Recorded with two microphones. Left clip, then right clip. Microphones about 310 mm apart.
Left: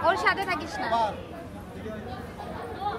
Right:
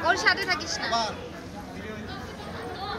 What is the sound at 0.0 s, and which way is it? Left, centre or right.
Speech, left.